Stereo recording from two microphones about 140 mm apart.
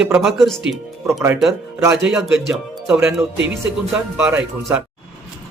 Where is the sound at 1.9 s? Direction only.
5° right (ahead or behind).